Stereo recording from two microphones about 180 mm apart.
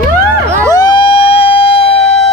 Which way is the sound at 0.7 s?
25° left (ahead or behind).